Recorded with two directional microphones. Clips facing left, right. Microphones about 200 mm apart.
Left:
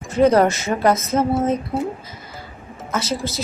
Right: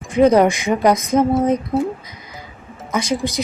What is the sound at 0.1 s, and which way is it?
A woman's voice, 10° right (ahead or behind).